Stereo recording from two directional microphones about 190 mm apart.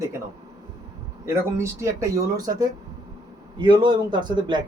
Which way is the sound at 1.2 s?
15° right (ahead or behind).